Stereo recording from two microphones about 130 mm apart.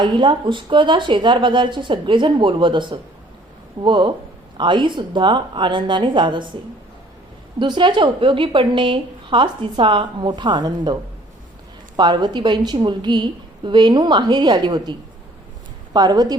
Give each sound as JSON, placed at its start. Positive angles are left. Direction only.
{"t": 0.0, "sound": "a woman's voice", "side_deg": -35}
{"t": 7.6, "sound": "a woman's voice", "side_deg": -35}
{"t": 11.9, "sound": "a woman's voice", "side_deg": -35}